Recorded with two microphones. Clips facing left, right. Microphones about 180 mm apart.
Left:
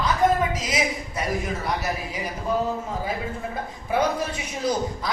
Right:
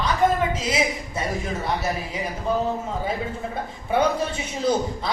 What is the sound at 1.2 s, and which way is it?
A man's voice, 25° right (ahead or behind).